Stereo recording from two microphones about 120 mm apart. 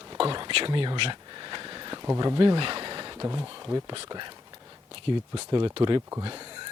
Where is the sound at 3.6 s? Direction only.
35° right (ahead or behind).